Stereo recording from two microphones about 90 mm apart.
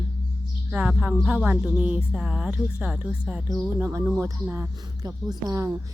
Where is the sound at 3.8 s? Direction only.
30° right (ahead or behind).